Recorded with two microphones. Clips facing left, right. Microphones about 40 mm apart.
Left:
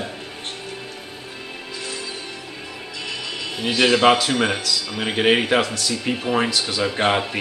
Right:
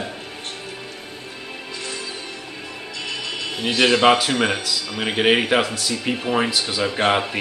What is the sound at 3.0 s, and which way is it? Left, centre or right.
Speech, centre.